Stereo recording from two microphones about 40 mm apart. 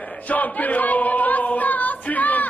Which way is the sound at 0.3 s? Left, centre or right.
Left.